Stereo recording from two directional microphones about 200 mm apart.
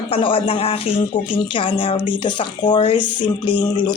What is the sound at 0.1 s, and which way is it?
A woman's voice, 25° left (ahead or behind).